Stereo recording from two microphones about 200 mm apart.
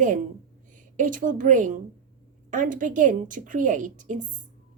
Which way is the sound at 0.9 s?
40° right (ahead or behind).